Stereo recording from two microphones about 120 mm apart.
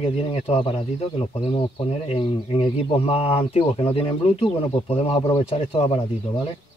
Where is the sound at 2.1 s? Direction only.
50° left (ahead or behind).